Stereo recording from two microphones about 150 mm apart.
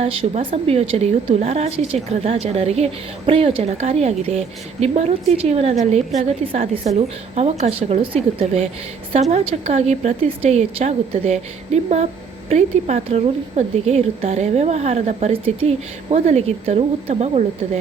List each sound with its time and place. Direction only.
0.0 s a woman's voice: 45° right (ahead or behind)